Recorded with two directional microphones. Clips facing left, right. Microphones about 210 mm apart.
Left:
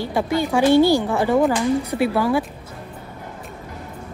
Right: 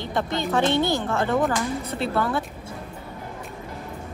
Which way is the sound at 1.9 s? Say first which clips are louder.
Left 5 dB; centre (ahead or behind).